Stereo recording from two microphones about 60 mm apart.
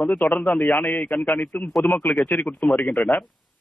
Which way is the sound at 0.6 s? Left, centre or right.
Left.